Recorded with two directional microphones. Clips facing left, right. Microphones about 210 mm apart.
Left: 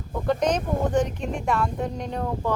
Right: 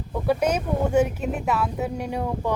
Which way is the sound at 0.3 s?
10° right (ahead or behind).